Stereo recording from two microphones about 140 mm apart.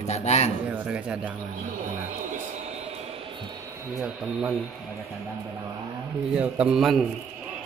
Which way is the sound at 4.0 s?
5° right (ahead or behind).